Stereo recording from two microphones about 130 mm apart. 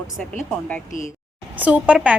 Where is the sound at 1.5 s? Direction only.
10° right (ahead or behind).